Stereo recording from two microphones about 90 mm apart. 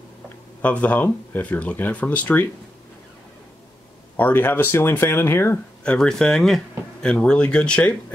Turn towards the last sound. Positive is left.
turn(degrees=10)  # may be behind; listen again after turning